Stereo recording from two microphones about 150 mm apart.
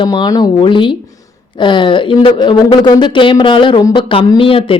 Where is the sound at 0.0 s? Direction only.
30° left (ahead or behind).